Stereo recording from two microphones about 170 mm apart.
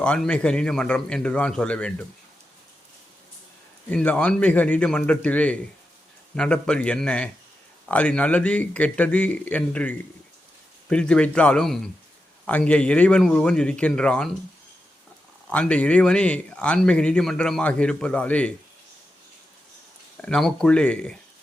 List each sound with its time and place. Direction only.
0.0 s speech: 5° left (ahead or behind)
3.8 s a man's voice: 10° left (ahead or behind)
15.4 s speech: 5° left (ahead or behind)
20.2 s a man's voice: 5° left (ahead or behind)